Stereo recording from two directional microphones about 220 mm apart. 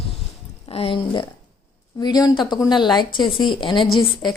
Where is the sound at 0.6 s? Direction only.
25° left (ahead or behind).